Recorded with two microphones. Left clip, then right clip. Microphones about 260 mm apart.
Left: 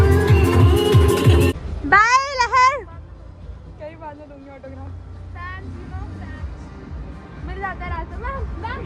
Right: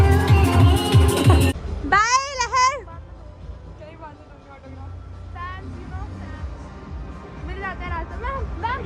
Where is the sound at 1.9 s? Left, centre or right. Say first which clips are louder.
Left 4 dB; centre.